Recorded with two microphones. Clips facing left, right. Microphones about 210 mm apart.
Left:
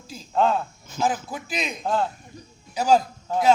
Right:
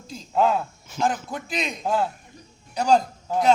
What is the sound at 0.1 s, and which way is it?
A man's voice, centre (ahead or behind).